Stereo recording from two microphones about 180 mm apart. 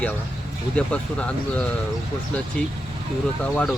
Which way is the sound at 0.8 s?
5° left (ahead or behind).